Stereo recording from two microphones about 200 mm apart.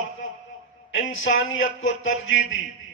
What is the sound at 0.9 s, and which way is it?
Speech, 75° left (ahead or behind).